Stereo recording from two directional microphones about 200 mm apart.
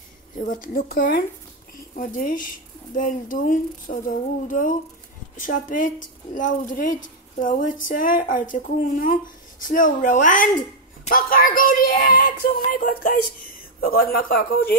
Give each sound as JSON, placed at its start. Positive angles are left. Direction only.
{"t": 0.4, "sound": "speech", "side_deg": 40}